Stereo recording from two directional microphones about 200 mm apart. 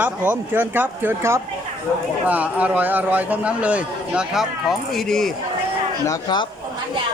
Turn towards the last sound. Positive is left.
turn(degrees=20)  # may be behind; listen again after turning